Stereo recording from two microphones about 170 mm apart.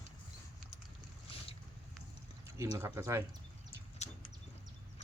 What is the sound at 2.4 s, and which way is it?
Speech, 15° right (ahead or behind).